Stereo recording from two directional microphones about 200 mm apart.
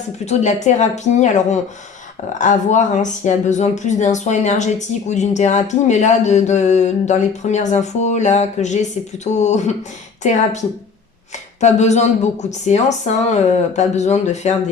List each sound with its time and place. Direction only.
0.3 s speech: 35° left (ahead or behind)
11.6 s speech: 35° left (ahead or behind)